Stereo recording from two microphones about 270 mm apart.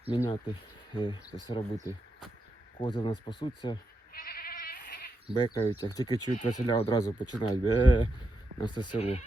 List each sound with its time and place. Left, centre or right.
0.1 s speech: centre
4.1 s goat: left
5.3 s speech: centre